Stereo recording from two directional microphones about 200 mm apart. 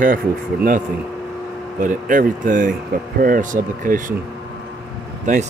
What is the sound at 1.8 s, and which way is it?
Speech, 40° right (ahead or behind).